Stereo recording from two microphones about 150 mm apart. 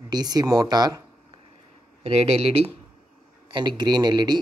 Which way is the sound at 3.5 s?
30° right (ahead or behind).